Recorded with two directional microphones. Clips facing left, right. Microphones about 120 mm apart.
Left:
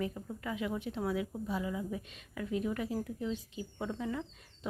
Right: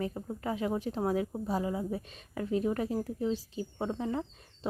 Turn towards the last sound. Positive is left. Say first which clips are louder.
# right 4 dB
turn(degrees=-35)  # may be behind; listen again after turning